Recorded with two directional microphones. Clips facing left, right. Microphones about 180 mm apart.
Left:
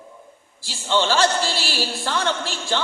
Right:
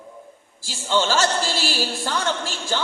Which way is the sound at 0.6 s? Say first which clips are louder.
Left 1 dB; 45° right (ahead or behind).